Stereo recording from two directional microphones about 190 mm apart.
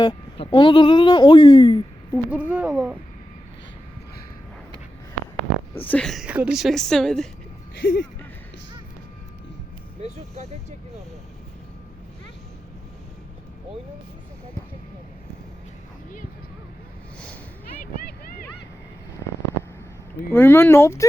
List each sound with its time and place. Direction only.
0.0 s speech: 25° left (ahead or behind)
2.3 s speech: 10° right (ahead or behind)
5.7 s a woman's voice: 10° left (ahead or behind)
7.8 s speech: 70° left (ahead or behind)
10.0 s speech: 35° right (ahead or behind)
20.3 s speech: 10° left (ahead or behind)